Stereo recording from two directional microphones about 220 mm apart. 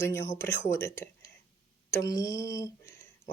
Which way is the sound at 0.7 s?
10° left (ahead or behind).